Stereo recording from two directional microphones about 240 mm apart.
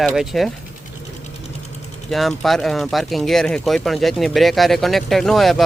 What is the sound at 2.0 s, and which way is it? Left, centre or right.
Speech, centre.